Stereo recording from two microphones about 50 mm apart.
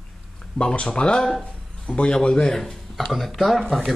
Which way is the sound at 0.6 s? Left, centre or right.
Centre.